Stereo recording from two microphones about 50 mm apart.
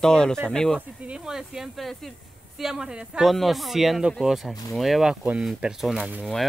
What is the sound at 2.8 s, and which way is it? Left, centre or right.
Speech, right.